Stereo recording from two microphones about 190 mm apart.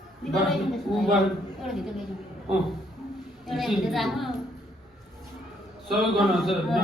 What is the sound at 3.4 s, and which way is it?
Speech, centre (ahead or behind).